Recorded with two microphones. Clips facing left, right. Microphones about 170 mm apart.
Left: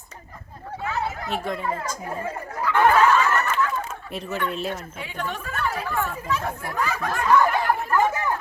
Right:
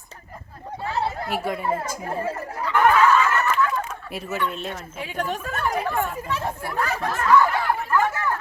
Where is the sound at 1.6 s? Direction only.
25° right (ahead or behind).